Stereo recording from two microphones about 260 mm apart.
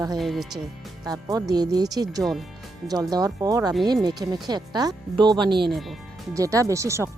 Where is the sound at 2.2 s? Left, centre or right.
Centre.